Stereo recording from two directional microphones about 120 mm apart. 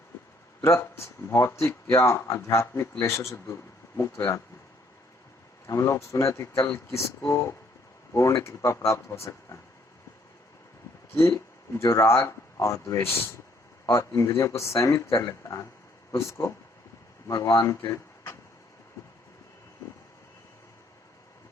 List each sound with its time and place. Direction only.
0.6 s speech: 25° left (ahead or behind)
5.6 s speech: 25° left (ahead or behind)
11.1 s speech: 25° left (ahead or behind)